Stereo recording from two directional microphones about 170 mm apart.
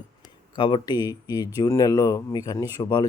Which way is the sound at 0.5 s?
25° left (ahead or behind).